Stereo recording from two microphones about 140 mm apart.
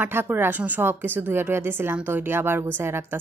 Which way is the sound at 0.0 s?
15° right (ahead or behind).